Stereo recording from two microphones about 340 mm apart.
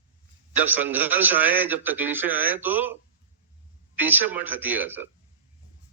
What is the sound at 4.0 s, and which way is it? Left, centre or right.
A man's voice, centre.